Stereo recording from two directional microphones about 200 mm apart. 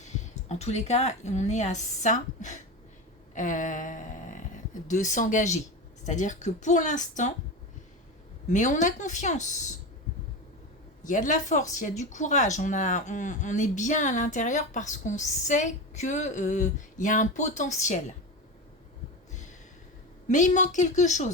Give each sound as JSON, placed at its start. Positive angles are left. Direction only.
{"t": 0.0, "sound": "a woman's voice", "side_deg": 35}
{"t": 3.3, "sound": "a sound", "side_deg": 40}
{"t": 6.1, "sound": "speech", "side_deg": 40}
{"t": 8.4, "sound": "speech", "side_deg": 40}
{"t": 11.0, "sound": "speech", "side_deg": 40}
{"t": 19.3, "sound": "a sound", "side_deg": 35}
{"t": 20.2, "sound": "speech", "side_deg": 35}